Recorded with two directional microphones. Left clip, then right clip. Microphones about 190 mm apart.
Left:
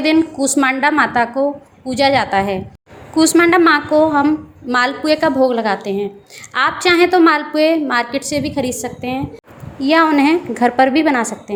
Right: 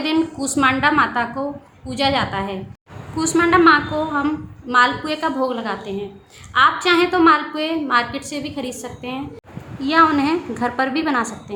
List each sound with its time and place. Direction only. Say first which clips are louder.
0.0 s a woman's voice: left 6 dB; 20° left (ahead or behind)
4.7 s a woman's voice: left 1 dB; 30° left (ahead or behind)